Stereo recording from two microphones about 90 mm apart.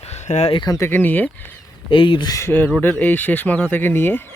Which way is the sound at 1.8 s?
70° left (ahead or behind).